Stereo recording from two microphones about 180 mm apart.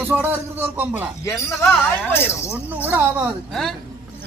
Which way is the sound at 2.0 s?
15° left (ahead or behind).